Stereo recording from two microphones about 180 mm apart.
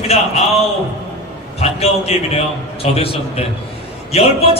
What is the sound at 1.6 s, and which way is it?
Speech, 35° left (ahead or behind).